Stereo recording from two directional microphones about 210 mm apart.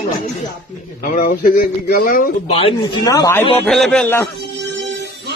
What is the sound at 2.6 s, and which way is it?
Speech, 20° left (ahead or behind).